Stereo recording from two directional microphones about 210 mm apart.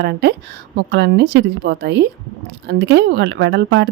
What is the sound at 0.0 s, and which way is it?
A woman's voice, 55° right (ahead or behind).